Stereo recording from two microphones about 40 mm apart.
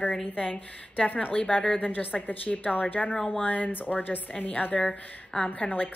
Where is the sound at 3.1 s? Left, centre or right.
Centre.